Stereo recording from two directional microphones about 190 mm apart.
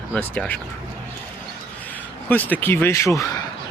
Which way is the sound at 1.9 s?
10° left (ahead or behind).